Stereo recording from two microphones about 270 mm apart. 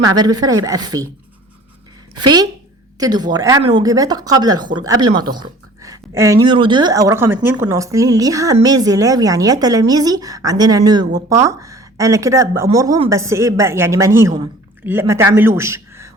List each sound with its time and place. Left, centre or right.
0.0 s speech: centre
2.1 s speech: centre